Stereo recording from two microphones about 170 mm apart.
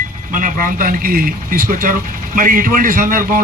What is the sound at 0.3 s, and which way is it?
A man's voice, 55° right (ahead or behind).